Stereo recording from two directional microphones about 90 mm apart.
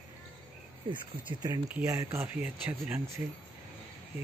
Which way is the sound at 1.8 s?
30° right (ahead or behind).